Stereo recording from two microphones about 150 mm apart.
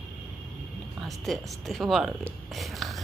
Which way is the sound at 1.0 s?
Centre (ahead or behind).